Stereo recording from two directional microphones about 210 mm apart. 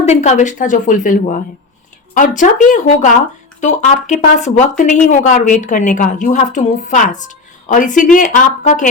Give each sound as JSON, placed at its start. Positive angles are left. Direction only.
{"t": 0.0, "sound": "a woman's voice", "side_deg": 30}